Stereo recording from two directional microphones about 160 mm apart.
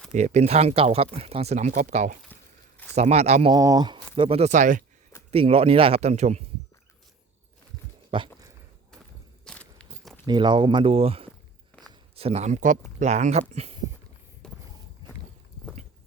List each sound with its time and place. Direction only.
0.1 s speech: 45° right (ahead or behind)
2.3 s crumpling: 10° left (ahead or behind)
2.9 s speech: 40° right (ahead or behind)
3.5 s speech: 25° right (ahead or behind); by 4.8 s 50° right (ahead or behind)
5.3 s speech: 35° right (ahead or behind)
8.1 s speech: 30° right (ahead or behind)
9.4 s a sound: 5° left (ahead or behind)
10.2 s speech: 30° right (ahead or behind)
11.7 s a sound: 10° left (ahead or behind)
12.1 s speech: 40° right (ahead or behind)
14.4 s walk: 5° left (ahead or behind)